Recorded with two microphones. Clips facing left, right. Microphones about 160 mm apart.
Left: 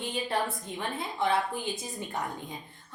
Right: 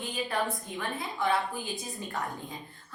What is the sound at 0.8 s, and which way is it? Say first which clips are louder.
Speech: left 2 dB; 20° left (ahead or behind).